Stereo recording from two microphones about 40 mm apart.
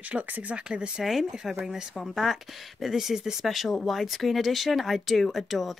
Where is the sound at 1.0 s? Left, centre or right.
Centre.